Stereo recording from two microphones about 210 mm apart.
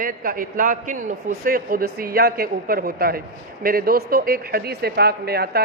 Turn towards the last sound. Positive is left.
turn(degrees=-50)  # may be behind; listen again after turning